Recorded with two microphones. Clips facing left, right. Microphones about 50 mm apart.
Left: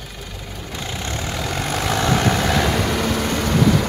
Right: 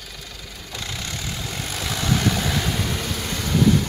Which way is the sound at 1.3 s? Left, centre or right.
Left.